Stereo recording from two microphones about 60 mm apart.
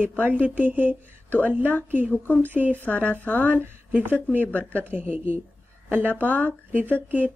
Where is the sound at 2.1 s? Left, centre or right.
Left.